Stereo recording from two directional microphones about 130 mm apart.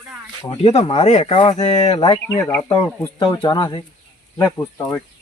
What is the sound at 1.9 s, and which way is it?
Speech, 40° left (ahead or behind).